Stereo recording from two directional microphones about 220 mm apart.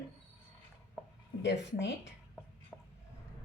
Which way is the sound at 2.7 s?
Centre (ahead or behind).